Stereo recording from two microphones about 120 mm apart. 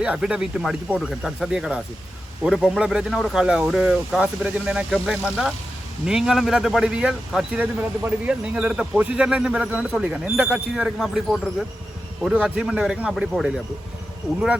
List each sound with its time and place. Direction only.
0.0 s speech: 10° right (ahead or behind)